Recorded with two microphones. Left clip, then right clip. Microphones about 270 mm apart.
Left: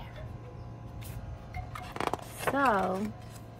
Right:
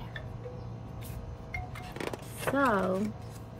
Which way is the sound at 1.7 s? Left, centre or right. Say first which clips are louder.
Left 9 dB; left.